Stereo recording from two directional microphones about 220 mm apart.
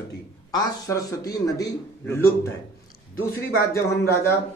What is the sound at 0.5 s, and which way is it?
Speech, 15° left (ahead or behind).